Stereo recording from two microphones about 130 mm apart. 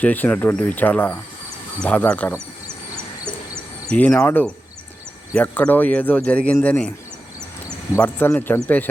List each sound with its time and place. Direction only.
0.0 s speech: 10° left (ahead or behind)
3.8 s speech: 10° left (ahead or behind)
8.0 s speech: 15° left (ahead or behind)